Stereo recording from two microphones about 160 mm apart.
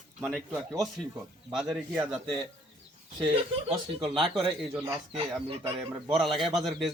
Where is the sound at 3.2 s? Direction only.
30° right (ahead or behind).